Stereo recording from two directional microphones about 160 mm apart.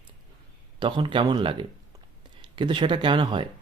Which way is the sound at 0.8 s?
30° right (ahead or behind).